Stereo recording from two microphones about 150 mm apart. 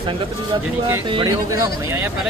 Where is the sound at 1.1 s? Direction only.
25° right (ahead or behind).